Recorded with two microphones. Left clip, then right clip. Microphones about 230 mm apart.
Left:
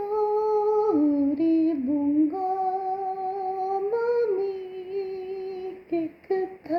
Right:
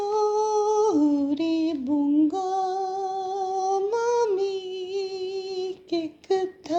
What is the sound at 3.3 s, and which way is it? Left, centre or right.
Music, right.